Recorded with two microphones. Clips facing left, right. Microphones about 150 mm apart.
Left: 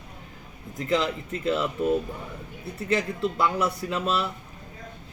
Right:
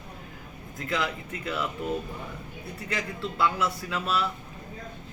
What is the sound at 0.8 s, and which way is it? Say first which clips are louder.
Speech: left 5 dB; 20° left (ahead or behind).